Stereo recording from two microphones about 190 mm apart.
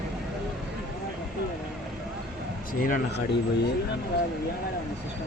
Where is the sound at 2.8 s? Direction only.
45° left (ahead or behind).